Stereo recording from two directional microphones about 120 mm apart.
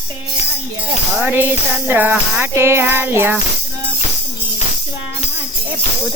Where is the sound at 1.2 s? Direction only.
15° right (ahead or behind).